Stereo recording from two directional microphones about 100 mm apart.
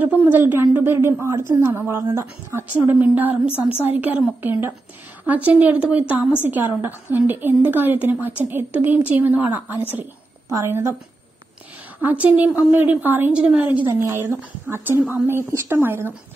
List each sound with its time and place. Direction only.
0.0 s a woman's voice: 15° right (ahead or behind)
12.0 s a woman's voice: 15° right (ahead or behind)